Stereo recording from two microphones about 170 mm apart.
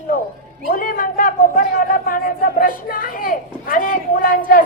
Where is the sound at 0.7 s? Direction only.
55° left (ahead or behind).